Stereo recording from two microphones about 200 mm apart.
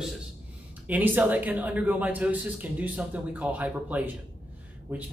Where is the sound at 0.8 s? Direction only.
10° right (ahead or behind).